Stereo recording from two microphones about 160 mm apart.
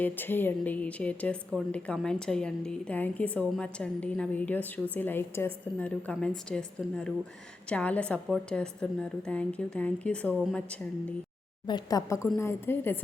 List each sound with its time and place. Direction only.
0.0 s a woman's voice: 10° left (ahead or behind)
11.6 s a woman's voice: 25° left (ahead or behind)